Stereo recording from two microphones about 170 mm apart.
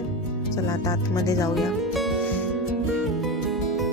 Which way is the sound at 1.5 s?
Centre (ahead or behind).